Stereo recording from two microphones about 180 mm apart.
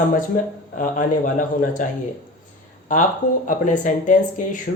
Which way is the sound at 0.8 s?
50° left (ahead or behind).